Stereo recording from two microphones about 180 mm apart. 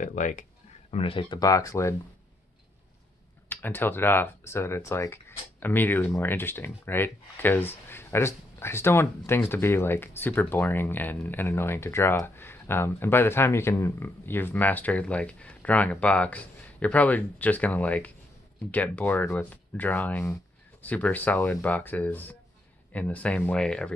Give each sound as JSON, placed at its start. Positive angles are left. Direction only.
{"t": 0.0, "sound": "speech", "side_deg": 45}
{"t": 0.9, "sound": "speech", "side_deg": 30}
{"t": 3.4, "sound": "speech", "side_deg": 10}